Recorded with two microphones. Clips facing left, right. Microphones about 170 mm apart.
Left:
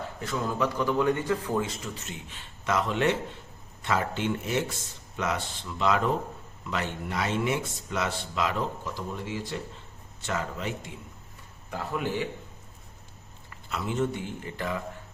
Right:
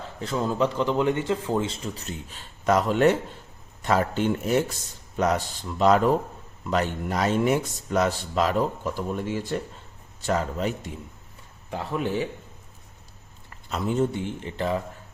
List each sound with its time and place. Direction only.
0.2 s speech: 30° right (ahead or behind)
8.8 s speech: 55° right (ahead or behind)
10.2 s speech: 35° right (ahead or behind)
13.5 s speech: 40° right (ahead or behind)